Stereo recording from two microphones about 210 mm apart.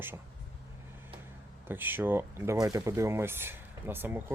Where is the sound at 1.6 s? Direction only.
10° right (ahead or behind).